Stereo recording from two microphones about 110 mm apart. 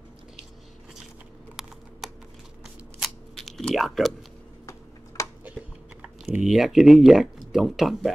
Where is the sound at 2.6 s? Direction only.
Centre (ahead or behind).